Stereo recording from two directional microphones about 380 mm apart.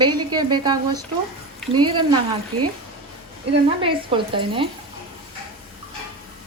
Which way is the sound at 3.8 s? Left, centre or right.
Centre.